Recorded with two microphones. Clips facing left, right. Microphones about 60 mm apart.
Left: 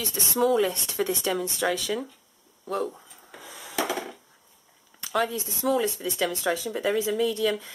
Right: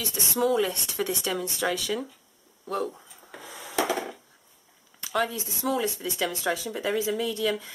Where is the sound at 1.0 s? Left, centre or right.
Left.